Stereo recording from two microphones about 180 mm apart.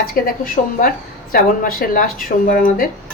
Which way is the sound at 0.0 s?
55° left (ahead or behind).